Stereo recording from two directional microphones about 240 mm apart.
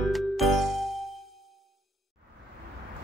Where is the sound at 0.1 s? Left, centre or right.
Centre.